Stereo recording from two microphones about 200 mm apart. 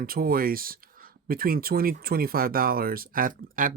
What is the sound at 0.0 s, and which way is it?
Speech, 45° right (ahead or behind).